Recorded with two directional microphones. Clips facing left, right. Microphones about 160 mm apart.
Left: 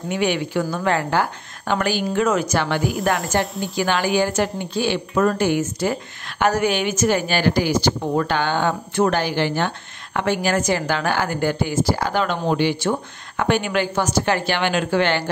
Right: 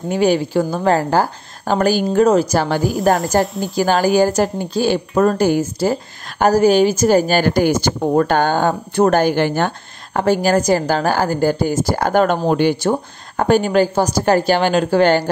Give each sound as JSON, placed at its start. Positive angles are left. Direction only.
{"t": 0.1, "sound": "a woman's voice", "side_deg": -35}